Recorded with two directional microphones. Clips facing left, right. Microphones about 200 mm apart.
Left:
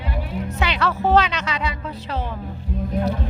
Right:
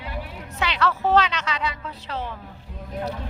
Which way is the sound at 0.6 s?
10° left (ahead or behind).